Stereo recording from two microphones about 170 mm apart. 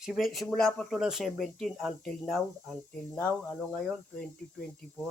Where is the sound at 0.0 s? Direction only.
Centre (ahead or behind).